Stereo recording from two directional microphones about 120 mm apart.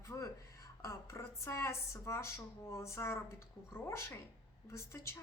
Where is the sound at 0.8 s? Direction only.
25° left (ahead or behind).